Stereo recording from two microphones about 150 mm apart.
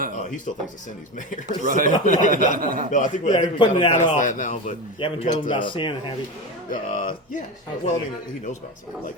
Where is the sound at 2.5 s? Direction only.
70° right (ahead or behind).